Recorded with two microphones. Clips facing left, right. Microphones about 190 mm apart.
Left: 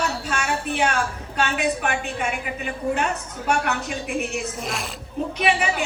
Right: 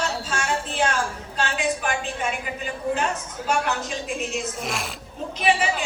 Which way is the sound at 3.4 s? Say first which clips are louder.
Left 1 dB; 60° left (ahead or behind).